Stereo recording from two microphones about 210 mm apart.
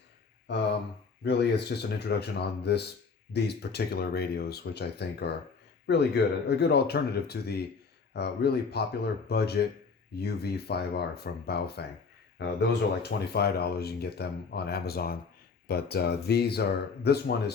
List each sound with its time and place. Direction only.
1.2 s speech: 55° left (ahead or behind)